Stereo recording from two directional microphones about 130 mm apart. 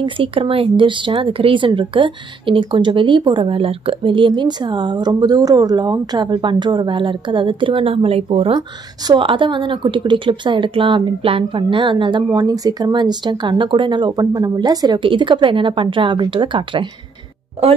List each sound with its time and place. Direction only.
0.0 s speech: 45° right (ahead or behind)
8.5 s speech: 35° right (ahead or behind)